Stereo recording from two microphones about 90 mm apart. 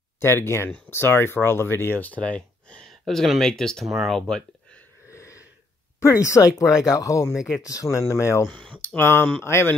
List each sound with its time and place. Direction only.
0.2 s speech: 25° left (ahead or behind); by 4.5 s 5° left (ahead or behind)
5.1 s wheeze: 35° left (ahead or behind)
5.9 s speech: 30° left (ahead or behind)